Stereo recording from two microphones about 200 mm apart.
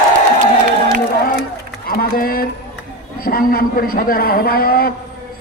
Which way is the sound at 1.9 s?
45° left (ahead or behind).